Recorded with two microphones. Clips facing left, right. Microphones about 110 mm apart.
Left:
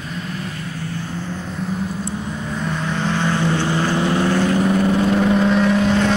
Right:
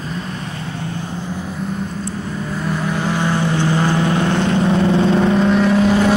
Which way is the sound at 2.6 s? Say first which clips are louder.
Right 2 dB; 5° right (ahead or behind).